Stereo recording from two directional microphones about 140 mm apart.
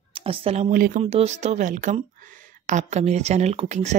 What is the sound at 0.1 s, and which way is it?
Speech, 40° right (ahead or behind).